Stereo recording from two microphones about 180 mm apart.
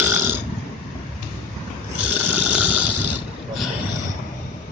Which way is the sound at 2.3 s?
10° right (ahead or behind).